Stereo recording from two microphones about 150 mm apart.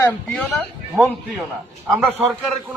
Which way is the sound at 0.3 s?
10° left (ahead or behind).